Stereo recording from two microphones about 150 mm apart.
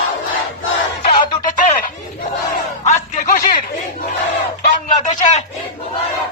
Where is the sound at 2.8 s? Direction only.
55° left (ahead or behind).